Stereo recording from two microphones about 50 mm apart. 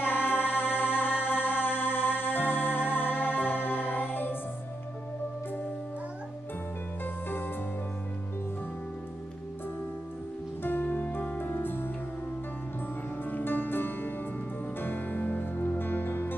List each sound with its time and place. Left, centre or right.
0.0 s music: left
10.6 s music: left
13.2 s music: left